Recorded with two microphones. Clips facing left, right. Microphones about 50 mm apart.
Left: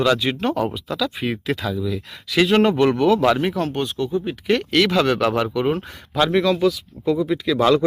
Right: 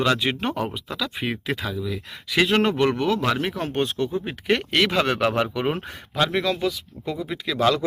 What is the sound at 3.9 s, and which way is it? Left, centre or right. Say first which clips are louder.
Speech: left 1 dB; right.